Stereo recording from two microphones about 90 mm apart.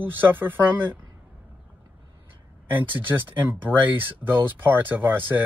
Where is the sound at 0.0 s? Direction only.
20° right (ahead or behind).